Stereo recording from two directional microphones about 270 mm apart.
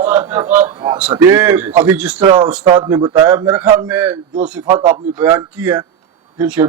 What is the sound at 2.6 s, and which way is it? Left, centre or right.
Speech, centre.